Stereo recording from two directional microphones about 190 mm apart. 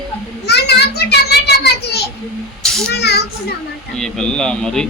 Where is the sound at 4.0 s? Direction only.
5° left (ahead or behind).